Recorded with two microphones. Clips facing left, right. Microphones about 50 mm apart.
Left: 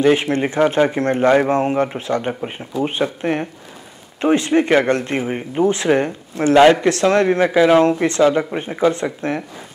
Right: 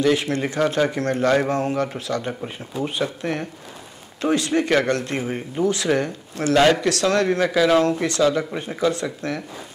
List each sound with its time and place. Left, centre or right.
0.0 s speech: left